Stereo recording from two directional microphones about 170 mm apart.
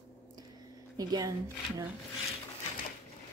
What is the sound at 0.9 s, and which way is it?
Speech, 20° right (ahead or behind).